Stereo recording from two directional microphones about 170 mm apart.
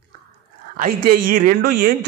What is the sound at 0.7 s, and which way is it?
Speech, 55° right (ahead or behind).